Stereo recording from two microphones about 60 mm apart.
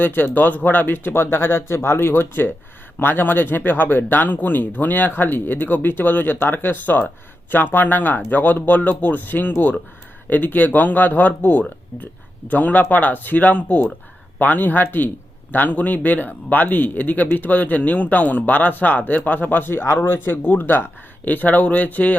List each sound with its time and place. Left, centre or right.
0.0 s speech: left